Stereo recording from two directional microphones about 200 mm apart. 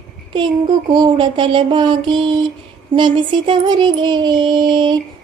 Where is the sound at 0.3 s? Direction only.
20° right (ahead or behind).